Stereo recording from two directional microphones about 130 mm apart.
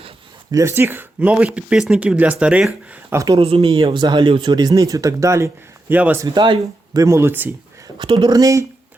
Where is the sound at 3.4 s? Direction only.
50° right (ahead or behind); by 6.2 s 15° right (ahead or behind).